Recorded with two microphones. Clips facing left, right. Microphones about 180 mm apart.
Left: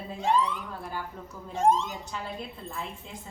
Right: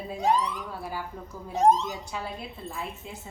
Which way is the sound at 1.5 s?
40° right (ahead or behind).